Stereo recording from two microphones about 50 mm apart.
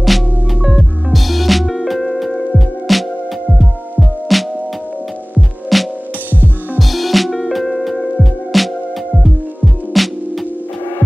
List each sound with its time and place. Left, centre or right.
0.0 s music: centre
4.3 s music: centre
5.7 s music: centre
6.3 s music: right
6.8 s music: centre
9.9 s music: centre